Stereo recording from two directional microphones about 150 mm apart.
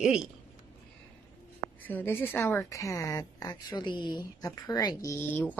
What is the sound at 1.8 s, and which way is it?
A woman's voice, 15° left (ahead or behind).